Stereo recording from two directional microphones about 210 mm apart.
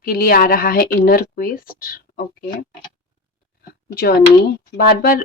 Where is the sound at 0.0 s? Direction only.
45° left (ahead or behind).